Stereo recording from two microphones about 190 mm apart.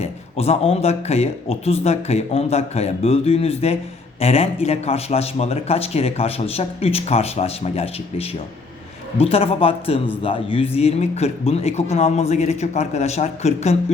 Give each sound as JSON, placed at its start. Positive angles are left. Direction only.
{"t": 0.0, "sound": "a man's voice", "side_deg": 35}